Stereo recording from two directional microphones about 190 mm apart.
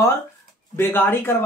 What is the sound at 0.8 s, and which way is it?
Speech, 10° left (ahead or behind).